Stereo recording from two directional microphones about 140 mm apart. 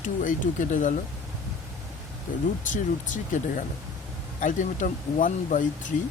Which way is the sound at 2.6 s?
70° left (ahead or behind).